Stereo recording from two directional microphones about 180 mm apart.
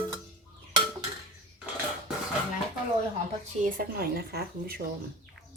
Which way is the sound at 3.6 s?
55° right (ahead or behind).